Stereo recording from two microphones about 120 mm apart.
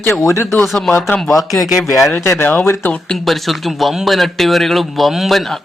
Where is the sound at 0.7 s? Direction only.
Centre (ahead or behind).